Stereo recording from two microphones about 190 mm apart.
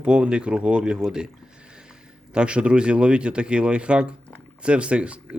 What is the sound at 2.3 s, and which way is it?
Speech, 5° right (ahead or behind).